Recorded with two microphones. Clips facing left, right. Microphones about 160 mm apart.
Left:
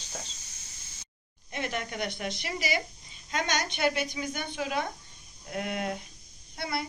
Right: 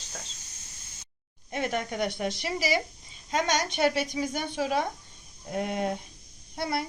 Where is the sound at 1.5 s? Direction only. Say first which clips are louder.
Right 4 dB; 45° right (ahead or behind).